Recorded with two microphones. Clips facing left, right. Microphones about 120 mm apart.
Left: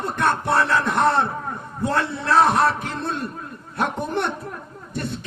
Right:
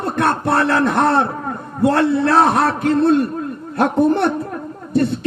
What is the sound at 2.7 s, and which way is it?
A man's voice, 35° right (ahead or behind).